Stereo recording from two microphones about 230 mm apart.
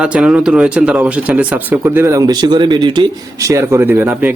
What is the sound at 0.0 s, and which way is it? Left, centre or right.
Speech, centre.